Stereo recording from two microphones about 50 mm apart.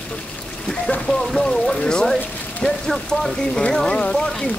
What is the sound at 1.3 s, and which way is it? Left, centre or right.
Speech, centre.